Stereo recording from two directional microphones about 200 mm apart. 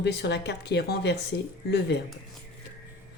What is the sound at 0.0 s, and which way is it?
A woman's voice, 55° left (ahead or behind).